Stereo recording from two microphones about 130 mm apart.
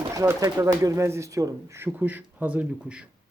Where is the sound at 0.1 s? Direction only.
25° right (ahead or behind).